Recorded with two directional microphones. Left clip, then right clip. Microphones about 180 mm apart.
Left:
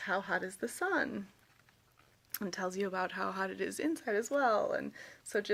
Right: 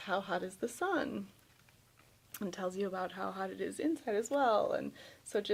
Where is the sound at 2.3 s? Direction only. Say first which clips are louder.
Left 1 dB; 20° left (ahead or behind).